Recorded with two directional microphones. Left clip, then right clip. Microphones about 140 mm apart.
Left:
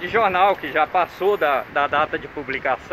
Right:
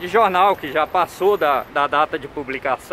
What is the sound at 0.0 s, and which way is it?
Speech, 15° right (ahead or behind).